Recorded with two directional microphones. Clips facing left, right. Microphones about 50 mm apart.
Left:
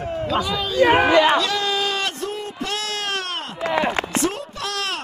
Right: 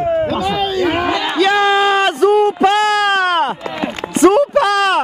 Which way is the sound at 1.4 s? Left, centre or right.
Right.